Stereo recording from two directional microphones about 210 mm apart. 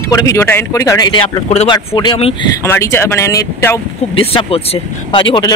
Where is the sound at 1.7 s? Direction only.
20° left (ahead or behind).